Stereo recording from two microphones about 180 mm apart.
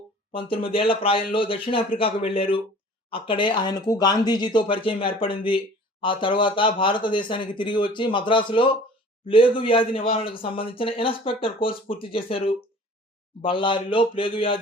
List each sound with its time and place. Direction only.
0.3 s speech: 30° left (ahead or behind)